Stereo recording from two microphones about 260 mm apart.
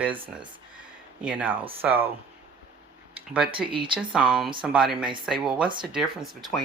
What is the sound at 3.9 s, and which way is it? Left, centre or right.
Speech, centre.